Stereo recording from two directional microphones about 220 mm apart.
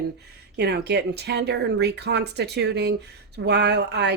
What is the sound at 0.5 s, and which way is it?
A woman's voice, 50° right (ahead or behind).